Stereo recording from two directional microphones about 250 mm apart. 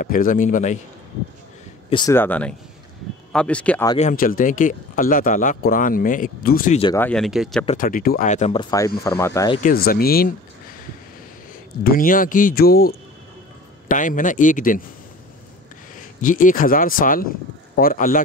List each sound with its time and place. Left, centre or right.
0.0 s speech: left
1.9 s speech: centre
3.9 s speech: left
6.8 s speech: centre
7.1 s speech: centre
7.6 s speech: left; by 9.6 s centre
9.6 s speech: left
11.8 s speech: left
16.0 s speech: left